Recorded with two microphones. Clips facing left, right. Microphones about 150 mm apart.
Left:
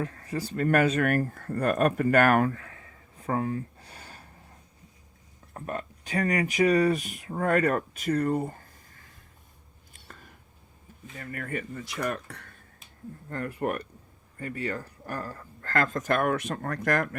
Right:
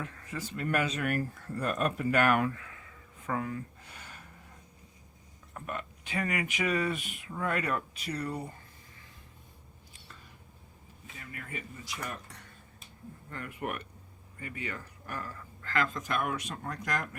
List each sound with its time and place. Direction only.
0.0 s speech: 35° left (ahead or behind)
5.5 s speech: 35° left (ahead or behind)
9.9 s a sound: 50° left (ahead or behind)
11.0 s speech: 50° left (ahead or behind)
13.3 s speech: 40° left (ahead or behind); by 17.2 s 55° left (ahead or behind)